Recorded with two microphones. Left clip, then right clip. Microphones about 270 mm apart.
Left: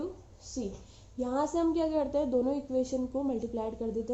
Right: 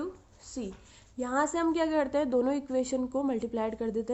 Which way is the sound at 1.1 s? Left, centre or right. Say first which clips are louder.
Right 1 dB; right.